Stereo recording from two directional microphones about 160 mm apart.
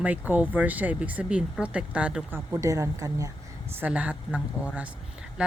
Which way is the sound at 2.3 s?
20° right (ahead or behind).